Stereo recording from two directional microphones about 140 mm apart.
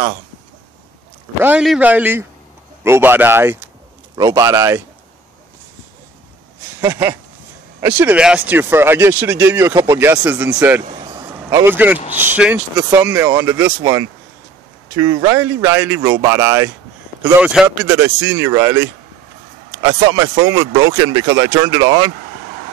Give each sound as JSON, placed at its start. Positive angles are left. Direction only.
{"t": 1.6, "sound": "speech", "side_deg": -5}
{"t": 6.8, "sound": "speech", "side_deg": -20}
{"t": 11.1, "sound": "vehicle", "side_deg": -20}
{"t": 12.1, "sound": "speech", "side_deg": -15}
{"t": 17.2, "sound": "speech", "side_deg": -5}